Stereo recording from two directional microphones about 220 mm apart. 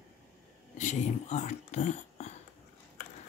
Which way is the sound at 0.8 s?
35° left (ahead or behind).